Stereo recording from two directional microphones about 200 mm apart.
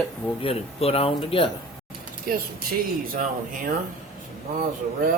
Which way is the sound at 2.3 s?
45° right (ahead or behind).